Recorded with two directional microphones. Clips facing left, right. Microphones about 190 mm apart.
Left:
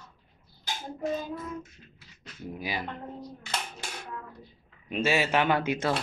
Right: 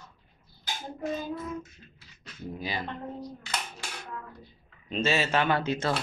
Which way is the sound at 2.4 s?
10° left (ahead or behind).